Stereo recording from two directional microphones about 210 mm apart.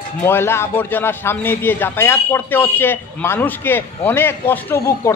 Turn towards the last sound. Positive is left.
turn(degrees=10)  # may be behind; listen again after turning